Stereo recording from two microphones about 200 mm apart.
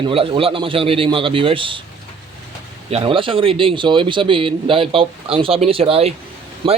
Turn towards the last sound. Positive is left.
turn(degrees=-25)  # may be behind; listen again after turning